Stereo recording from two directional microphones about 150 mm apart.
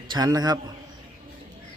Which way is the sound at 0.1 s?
25° right (ahead or behind).